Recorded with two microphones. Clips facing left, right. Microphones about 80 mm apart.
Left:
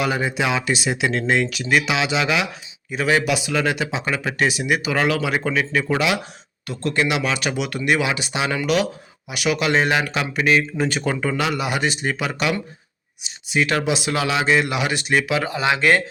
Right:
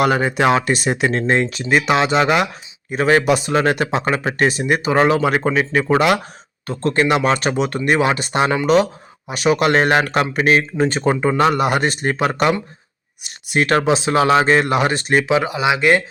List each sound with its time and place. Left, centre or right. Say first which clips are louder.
0.0 s speech: right 6 dB; right
10.8 s speech: right 5 dB; right
11.3 s speech: right 7 dB; right
15.4 s speech: right 3 dB; centre